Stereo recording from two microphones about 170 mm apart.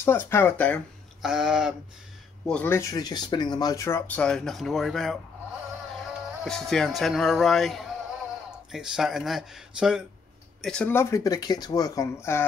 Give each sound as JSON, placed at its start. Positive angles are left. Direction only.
{"t": 0.0, "sound": "speech", "side_deg": 15}
{"t": 1.2, "sound": "speech", "side_deg": -5}
{"t": 2.4, "sound": "speech", "side_deg": 10}
{"t": 6.4, "sound": "speech", "side_deg": 5}